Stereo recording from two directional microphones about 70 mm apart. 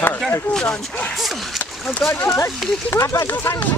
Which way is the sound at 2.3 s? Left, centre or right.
Left.